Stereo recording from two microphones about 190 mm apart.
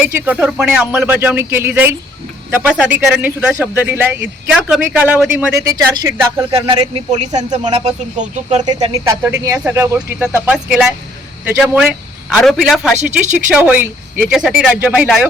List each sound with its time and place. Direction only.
0.0 s speech: 10° right (ahead or behind)
5.6 s speech: 20° right (ahead or behind)
7.6 s speech: 35° right (ahead or behind)
8.6 s a man's voice: 20° right (ahead or behind); by 15.3 s 5° right (ahead or behind)